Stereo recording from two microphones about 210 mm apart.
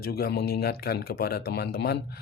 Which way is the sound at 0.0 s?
50° left (ahead or behind).